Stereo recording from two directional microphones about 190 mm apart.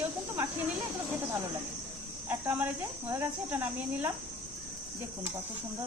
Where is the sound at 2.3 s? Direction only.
10° right (ahead or behind).